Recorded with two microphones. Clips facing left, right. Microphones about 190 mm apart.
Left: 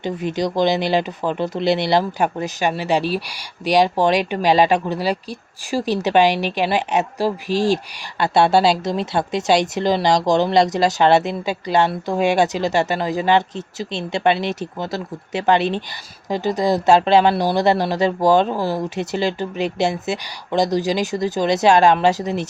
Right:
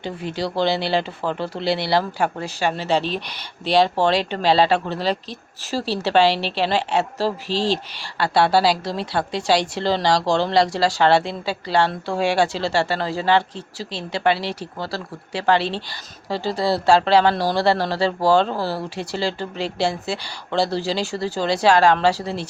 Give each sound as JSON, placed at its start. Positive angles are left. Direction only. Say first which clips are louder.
{"t": 0.0, "sound": "speech", "louder": "left 4 dB", "side_deg": 20}